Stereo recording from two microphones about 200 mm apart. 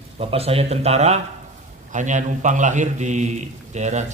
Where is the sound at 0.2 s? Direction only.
30° right (ahead or behind).